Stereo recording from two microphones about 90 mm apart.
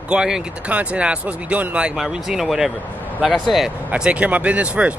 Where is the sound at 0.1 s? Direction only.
10° right (ahead or behind).